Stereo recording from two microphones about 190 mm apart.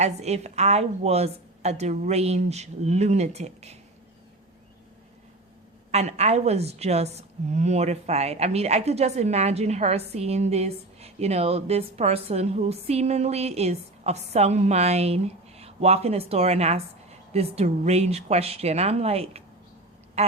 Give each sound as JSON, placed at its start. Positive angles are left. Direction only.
{"t": 0.0, "sound": "a woman's voice", "side_deg": -35}
{"t": 5.9, "sound": "a woman's voice", "side_deg": -35}